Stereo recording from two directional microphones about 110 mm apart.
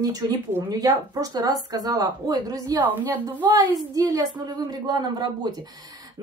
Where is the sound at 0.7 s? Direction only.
35° right (ahead or behind).